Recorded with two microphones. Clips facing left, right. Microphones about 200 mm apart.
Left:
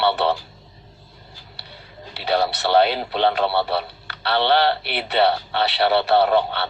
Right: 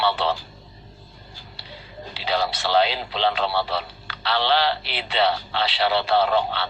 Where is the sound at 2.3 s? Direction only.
60° left (ahead or behind).